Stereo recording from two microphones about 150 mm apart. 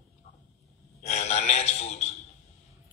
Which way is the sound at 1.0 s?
50° left (ahead or behind).